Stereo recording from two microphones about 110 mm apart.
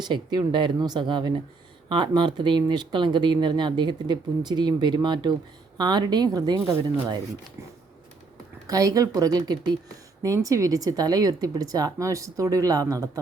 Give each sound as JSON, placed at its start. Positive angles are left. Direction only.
{"t": 0.0, "sound": "speech", "side_deg": -40}
{"t": 8.6, "sound": "speech", "side_deg": -35}